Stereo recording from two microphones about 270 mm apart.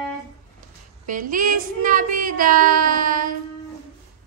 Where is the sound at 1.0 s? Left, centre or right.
Right.